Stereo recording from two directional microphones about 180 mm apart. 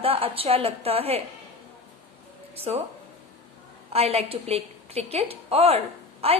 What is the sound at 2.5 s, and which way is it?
Speech, 35° right (ahead or behind).